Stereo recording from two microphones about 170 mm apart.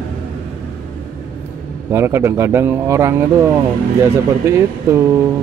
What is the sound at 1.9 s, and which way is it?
Speech, 15° right (ahead or behind).